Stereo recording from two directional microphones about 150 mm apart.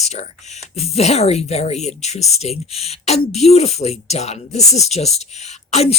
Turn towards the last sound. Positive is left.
turn(degrees=45)  # may be behind; listen again after turning